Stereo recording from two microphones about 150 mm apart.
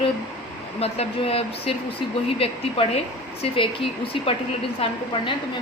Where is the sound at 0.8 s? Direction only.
40° left (ahead or behind).